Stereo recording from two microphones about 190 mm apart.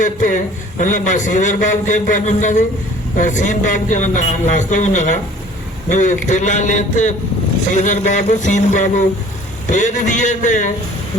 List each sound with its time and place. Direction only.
0.0 s a man's voice: 45° left (ahead or behind)